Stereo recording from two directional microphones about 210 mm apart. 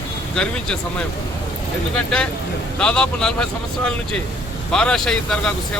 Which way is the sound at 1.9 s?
5° left (ahead or behind).